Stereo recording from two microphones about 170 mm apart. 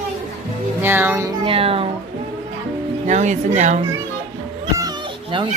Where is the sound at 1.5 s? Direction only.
35° right (ahead or behind).